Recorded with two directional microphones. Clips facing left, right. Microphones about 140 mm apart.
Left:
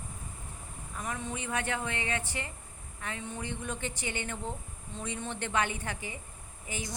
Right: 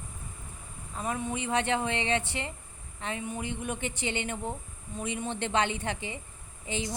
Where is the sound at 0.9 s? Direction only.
20° right (ahead or behind).